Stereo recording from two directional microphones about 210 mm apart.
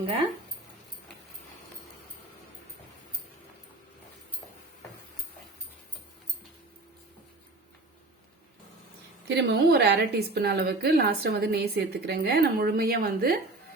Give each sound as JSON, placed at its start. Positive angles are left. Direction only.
{"t": 9.2, "sound": "a woman's voice", "side_deg": -50}